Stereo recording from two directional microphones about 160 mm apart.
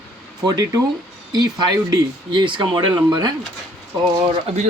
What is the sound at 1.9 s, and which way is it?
Speech, 30° right (ahead or behind).